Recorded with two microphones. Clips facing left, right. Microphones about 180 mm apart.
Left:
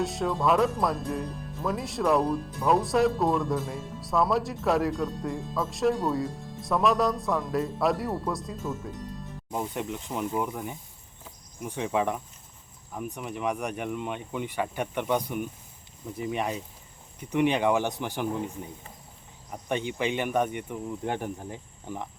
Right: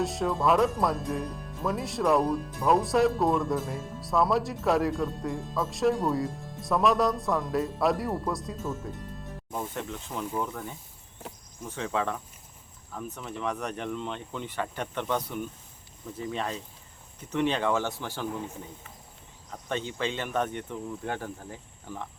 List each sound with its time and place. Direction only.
0.0 s speech: centre (ahead or behind)
9.5 s speech: 15° left (ahead or behind)
11.2 s cricket: 70° right (ahead or behind)
11.6 s speech: 15° left (ahead or behind)
19.5 s speech: 15° left (ahead or behind)